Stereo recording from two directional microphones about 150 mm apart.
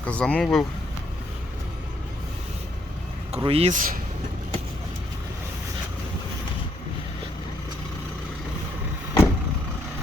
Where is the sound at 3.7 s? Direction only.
65° right (ahead or behind).